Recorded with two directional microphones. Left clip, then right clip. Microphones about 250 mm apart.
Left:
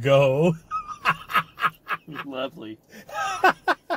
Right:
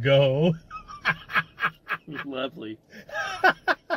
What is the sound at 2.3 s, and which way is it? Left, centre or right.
Speech, left.